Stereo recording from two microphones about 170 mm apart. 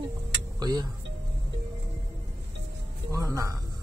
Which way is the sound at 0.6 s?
25° right (ahead or behind).